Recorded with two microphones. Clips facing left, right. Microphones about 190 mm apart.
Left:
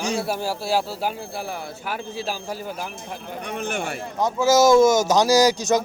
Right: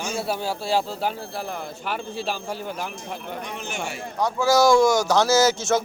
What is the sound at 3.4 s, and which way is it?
Speech, 55° left (ahead or behind).